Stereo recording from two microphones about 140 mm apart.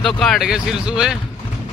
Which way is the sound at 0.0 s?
Centre (ahead or behind).